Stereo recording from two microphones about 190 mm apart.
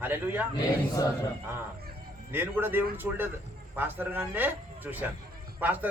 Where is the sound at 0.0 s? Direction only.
10° right (ahead or behind).